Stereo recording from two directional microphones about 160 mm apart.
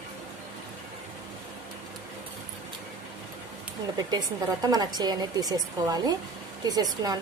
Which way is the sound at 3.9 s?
25° right (ahead or behind).